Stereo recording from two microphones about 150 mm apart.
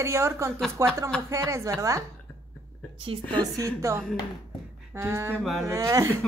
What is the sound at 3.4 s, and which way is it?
A woman's voice, 20° right (ahead or behind).